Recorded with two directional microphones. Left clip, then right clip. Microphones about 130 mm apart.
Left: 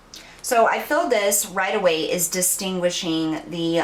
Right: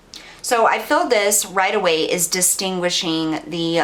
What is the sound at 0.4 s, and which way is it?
A woman's voice, 25° right (ahead or behind).